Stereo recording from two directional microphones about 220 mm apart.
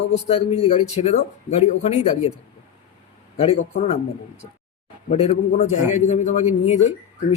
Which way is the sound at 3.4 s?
25° left (ahead or behind).